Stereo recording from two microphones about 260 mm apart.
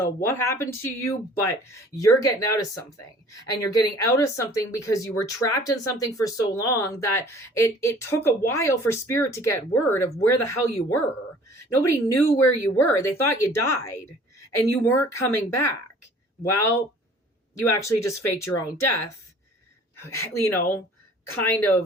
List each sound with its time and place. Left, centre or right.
0.0 s speech: centre
17.7 s speech: centre